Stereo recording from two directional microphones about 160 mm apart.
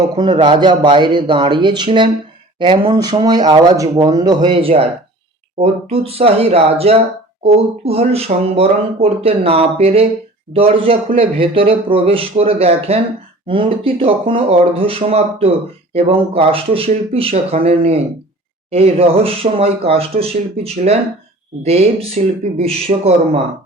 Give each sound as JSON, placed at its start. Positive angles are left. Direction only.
{"t": 0.2, "sound": "speech", "side_deg": -30}
{"t": 4.4, "sound": "speech", "side_deg": -35}